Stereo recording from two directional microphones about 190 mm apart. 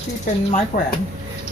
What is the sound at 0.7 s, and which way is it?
Speech, 50° left (ahead or behind).